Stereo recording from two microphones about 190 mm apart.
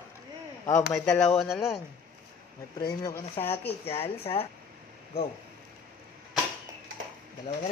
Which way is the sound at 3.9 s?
30° left (ahead or behind).